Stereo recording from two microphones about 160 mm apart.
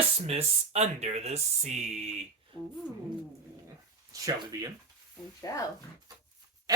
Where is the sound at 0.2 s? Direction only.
40° right (ahead or behind).